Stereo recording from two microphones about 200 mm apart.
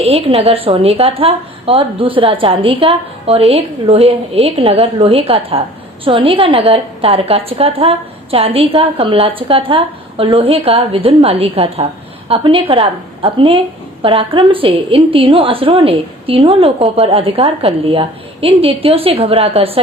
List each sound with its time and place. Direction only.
0.0 s a woman's voice: 30° right (ahead or behind)